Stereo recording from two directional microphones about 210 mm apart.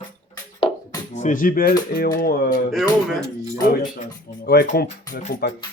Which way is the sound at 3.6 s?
40° left (ahead or behind).